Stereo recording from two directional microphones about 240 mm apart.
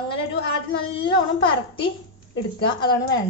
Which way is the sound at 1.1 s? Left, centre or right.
Centre.